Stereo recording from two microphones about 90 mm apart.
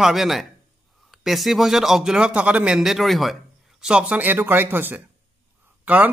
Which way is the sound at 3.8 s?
10° right (ahead or behind).